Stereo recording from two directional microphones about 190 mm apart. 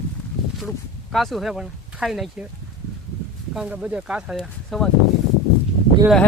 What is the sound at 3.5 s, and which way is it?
Speech, 5° right (ahead or behind).